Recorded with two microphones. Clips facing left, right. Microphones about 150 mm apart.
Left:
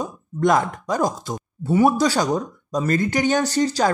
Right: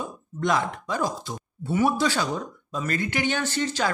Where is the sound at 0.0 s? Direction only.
45° left (ahead or behind).